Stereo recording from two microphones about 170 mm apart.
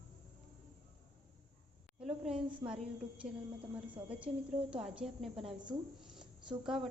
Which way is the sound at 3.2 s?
45° right (ahead or behind).